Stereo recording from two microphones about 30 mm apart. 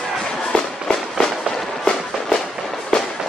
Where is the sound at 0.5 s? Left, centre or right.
Left.